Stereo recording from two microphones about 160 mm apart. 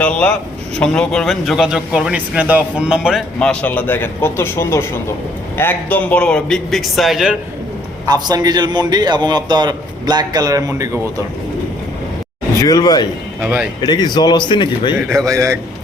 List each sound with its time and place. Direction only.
0.0 s a man's voice: 5° left (ahead or behind)
8.0 s a man's voice: 25° right (ahead or behind)
12.5 s a man's voice: 20° left (ahead or behind)
13.4 s speech: 15° right (ahead or behind)
13.8 s a man's voice: 25° left (ahead or behind)
15.1 s a man's voice: 20° right (ahead or behind)